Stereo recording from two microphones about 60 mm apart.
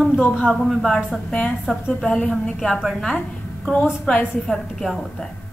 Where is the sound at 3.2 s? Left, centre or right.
Centre.